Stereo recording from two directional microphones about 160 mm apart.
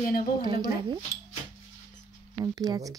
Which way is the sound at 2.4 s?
25° right (ahead or behind).